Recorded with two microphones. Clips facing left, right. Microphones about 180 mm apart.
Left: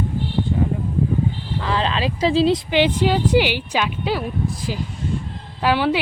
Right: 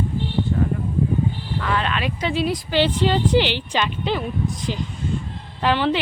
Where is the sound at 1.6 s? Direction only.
30° left (ahead or behind).